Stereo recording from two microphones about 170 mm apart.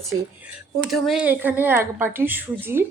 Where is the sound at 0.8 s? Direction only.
Centre (ahead or behind).